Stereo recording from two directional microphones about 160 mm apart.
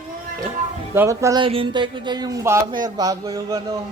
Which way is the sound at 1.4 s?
35° right (ahead or behind).